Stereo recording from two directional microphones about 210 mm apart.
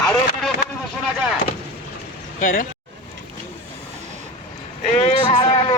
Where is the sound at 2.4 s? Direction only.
40° left (ahead or behind).